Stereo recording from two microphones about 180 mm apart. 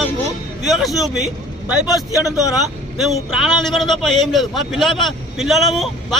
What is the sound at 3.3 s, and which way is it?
A man's voice, centre (ahead or behind).